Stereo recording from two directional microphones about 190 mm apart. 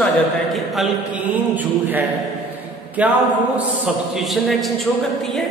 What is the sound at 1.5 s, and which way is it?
A man's voice, 10° right (ahead or behind).